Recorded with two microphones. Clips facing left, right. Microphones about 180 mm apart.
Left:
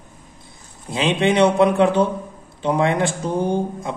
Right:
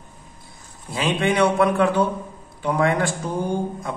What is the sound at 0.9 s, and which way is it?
Speech, 20° left (ahead or behind).